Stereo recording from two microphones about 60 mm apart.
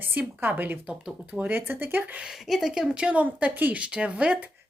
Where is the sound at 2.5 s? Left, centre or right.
Centre.